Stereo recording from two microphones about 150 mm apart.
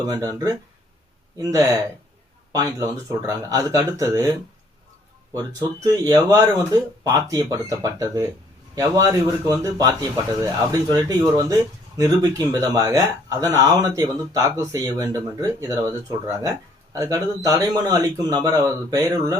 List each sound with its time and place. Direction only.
0.0 s speech: 25° right (ahead or behind)
5.3 s a man's voice: 25° right (ahead or behind)